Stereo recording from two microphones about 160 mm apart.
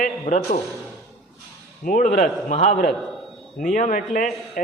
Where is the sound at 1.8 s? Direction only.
60° left (ahead or behind).